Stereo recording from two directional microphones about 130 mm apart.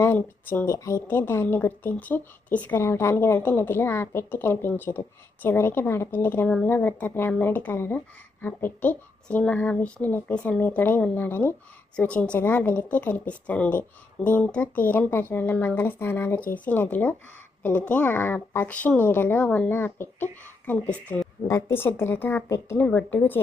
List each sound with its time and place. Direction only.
0.0 s speech: 15° left (ahead or behind)
22.9 s speech: 10° left (ahead or behind)